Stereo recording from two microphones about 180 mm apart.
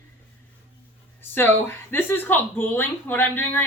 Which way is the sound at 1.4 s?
10° left (ahead or behind).